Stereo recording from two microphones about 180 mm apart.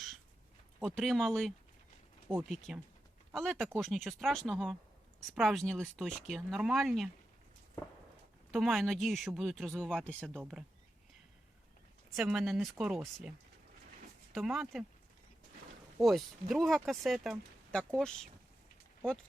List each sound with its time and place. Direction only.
0.8 s speech: centre (ahead or behind)
8.5 s speech: centre (ahead or behind)
12.1 s speech: centre (ahead or behind)
14.3 s speech: centre (ahead or behind)
16.0 s speech: centre (ahead or behind)